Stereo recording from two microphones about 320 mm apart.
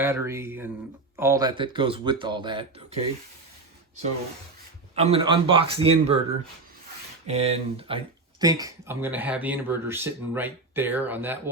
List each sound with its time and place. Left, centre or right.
0.0 s speech: centre
4.9 s speech: centre
7.3 s speech: centre